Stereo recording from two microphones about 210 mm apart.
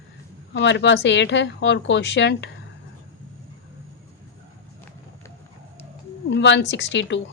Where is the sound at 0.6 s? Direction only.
55° left (ahead or behind).